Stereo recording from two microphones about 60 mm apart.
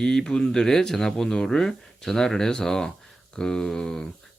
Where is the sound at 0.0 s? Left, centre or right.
Centre.